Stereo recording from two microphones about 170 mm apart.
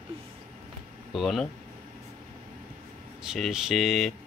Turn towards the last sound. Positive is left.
turn(degrees=0)  # may be behind; listen again after turning